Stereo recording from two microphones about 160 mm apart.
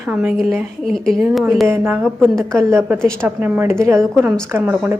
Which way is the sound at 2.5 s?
15° right (ahead or behind).